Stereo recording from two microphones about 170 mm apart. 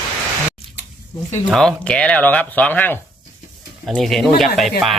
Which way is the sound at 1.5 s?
Centre (ahead or behind).